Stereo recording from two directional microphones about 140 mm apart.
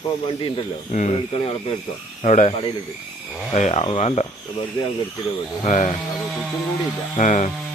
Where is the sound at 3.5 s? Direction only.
50° left (ahead or behind).